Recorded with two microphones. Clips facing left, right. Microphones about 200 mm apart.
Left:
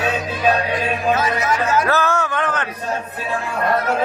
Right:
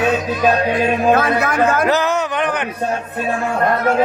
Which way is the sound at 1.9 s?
20° right (ahead or behind).